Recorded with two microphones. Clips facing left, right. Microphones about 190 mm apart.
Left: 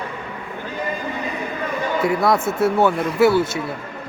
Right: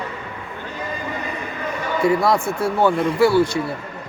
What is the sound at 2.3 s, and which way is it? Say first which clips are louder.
Speech: left 2 dB; 20° left (ahead or behind).